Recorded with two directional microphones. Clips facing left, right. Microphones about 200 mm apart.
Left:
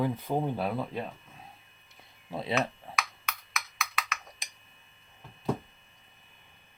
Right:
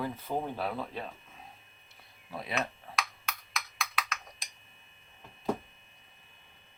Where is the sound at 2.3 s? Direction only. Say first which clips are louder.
Left 6 dB; 25° left (ahead or behind).